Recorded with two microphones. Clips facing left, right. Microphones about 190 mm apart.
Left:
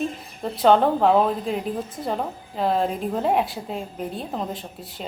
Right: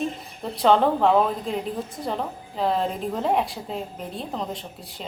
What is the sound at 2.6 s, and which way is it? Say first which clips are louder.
A woman's voice: left 2 dB; centre (ahead or behind).